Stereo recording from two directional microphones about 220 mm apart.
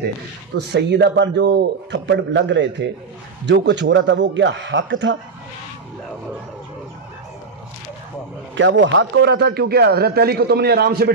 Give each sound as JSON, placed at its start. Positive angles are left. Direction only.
{"t": 0.7, "sound": "a man's voice", "side_deg": -50}
{"t": 8.5, "sound": "a man's voice", "side_deg": -55}